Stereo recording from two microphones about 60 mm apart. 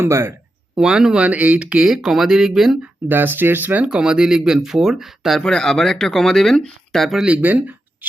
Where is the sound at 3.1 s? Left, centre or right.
Right.